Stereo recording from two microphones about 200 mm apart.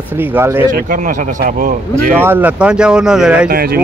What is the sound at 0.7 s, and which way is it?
Speech, 40° right (ahead or behind).